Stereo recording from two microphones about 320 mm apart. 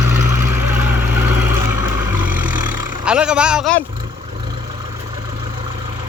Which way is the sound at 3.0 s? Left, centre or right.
Centre.